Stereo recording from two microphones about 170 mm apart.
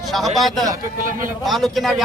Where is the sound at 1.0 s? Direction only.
50° right (ahead or behind).